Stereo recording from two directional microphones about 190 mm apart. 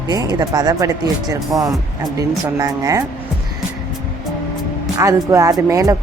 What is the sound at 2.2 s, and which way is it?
Speech, 15° right (ahead or behind).